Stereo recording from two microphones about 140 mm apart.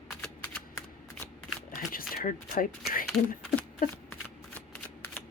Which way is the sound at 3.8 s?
90° left.